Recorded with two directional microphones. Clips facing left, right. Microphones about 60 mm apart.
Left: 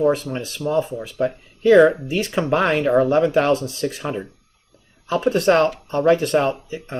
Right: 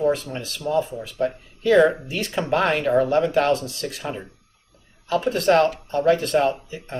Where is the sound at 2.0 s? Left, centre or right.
Centre.